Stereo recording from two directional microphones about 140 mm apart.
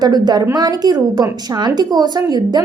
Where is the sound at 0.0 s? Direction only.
30° right (ahead or behind).